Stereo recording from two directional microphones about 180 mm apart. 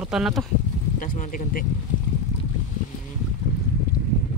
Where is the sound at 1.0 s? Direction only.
50° left (ahead or behind).